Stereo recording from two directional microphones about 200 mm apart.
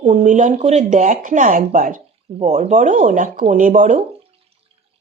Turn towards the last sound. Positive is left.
turn(degrees=-40)  # may be behind; listen again after turning